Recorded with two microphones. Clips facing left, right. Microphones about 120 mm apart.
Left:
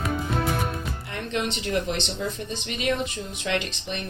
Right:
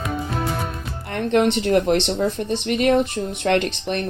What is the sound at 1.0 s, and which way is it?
Speech, 60° right (ahead or behind).